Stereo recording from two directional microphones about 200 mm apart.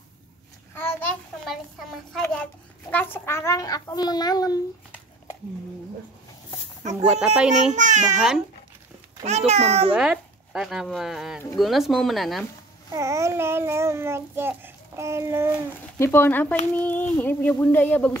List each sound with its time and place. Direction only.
0.7 s a sound: 10° left (ahead or behind)
1.4 s a woman's voice: centre (ahead or behind); by 4.6 s 20° left (ahead or behind)
6.8 s speech: 35° right (ahead or behind)
7.1 s speech: 5° right (ahead or behind)
7.7 s a child's voice: 35° right (ahead or behind)
9.5 s a child's voice: 30° right (ahead or behind)
9.9 s speech: 5° right (ahead or behind)
12.9 s a child's voice: 15° right (ahead or behind)
16.0 s a woman's voice: 10° left (ahead or behind)